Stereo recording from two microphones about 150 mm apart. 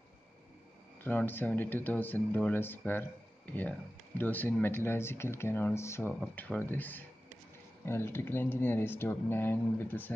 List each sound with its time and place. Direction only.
1.0 s speech: 15° left (ahead or behind)
6.2 s speech: 5° left (ahead or behind)